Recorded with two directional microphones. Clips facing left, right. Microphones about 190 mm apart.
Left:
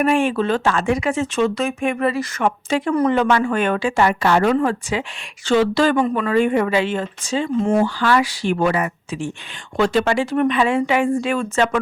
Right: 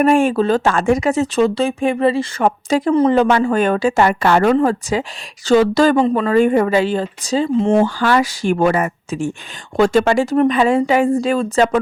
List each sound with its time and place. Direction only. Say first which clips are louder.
0.0 s speech: right 4 dB; 45° right (ahead or behind)
4.5 s speech: right 4 dB; 40° right (ahead or behind)
7.9 s speech: right 2 dB; 45° right (ahead or behind)